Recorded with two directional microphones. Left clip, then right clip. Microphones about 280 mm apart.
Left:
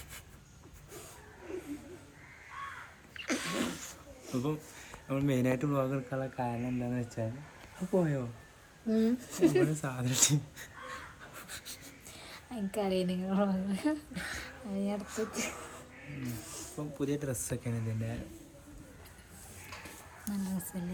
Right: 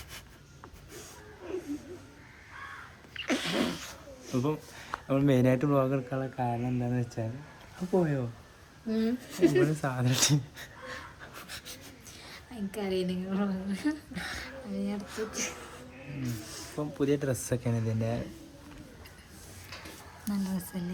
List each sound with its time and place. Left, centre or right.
1.5 s a sound: centre
3.2 s sneeze: centre
4.4 s speech: centre
9.8 s speech: centre
11.3 s pant: centre
12.3 s a woman's voice: centre
14.2 s a sound: centre
14.8 s a woman's voice: centre
15.3 s speech: centre
16.4 s zipper: centre
16.7 s speech: centre
20.2 s speech: centre